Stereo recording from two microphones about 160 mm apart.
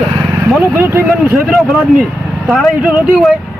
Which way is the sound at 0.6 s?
15° right (ahead or behind).